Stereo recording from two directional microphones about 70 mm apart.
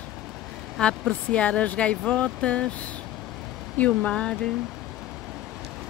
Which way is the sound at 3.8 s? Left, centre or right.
Centre.